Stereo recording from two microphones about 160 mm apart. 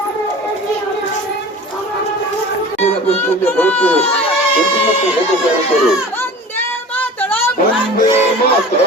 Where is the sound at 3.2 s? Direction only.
10° left (ahead or behind).